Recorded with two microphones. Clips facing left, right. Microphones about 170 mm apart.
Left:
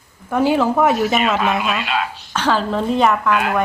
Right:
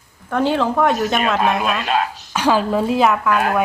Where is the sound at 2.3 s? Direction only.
10° right (ahead or behind).